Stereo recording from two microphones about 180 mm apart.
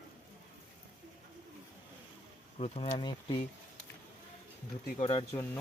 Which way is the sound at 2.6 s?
35° left (ahead or behind).